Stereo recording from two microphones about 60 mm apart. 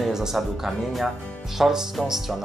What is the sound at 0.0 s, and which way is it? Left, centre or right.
Speech, centre.